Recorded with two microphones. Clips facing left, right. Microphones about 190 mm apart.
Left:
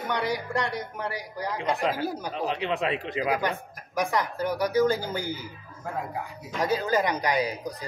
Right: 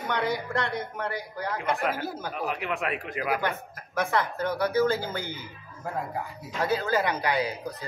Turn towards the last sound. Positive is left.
turn(degrees=15)  # may be behind; listen again after turning